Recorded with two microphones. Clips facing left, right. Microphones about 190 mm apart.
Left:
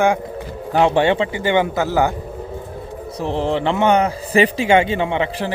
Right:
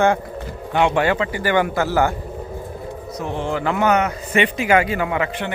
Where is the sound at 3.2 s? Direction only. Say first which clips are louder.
Left 4 dB; 30° left (ahead or behind).